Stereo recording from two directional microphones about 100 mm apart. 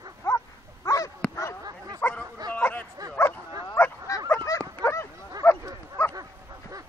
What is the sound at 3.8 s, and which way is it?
Bow-wow, 25° left (ahead or behind).